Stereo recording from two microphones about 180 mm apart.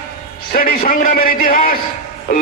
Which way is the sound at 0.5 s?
55° left (ahead or behind).